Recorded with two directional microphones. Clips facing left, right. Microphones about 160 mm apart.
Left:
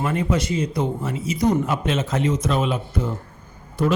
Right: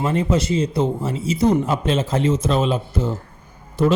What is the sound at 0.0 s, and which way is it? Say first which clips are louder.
Speech: right 3 dB; 30° right (ahead or behind).